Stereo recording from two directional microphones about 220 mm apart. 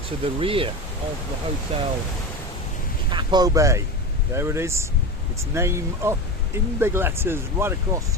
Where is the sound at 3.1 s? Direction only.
20° right (ahead or behind).